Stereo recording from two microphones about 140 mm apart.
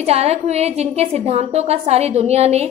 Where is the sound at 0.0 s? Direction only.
50° right (ahead or behind).